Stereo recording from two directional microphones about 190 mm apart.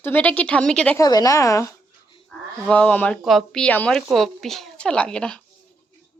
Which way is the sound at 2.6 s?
5° left (ahead or behind).